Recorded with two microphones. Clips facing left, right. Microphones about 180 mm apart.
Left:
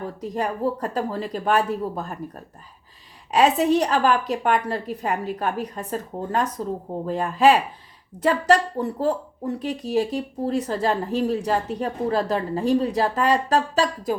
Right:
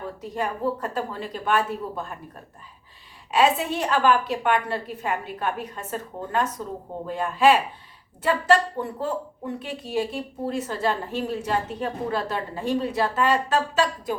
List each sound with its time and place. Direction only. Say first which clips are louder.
0.2 s speech: left 3 dB; 40° left (ahead or behind)